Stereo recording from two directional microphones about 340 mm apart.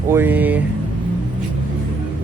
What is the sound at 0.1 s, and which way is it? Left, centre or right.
Speech, centre.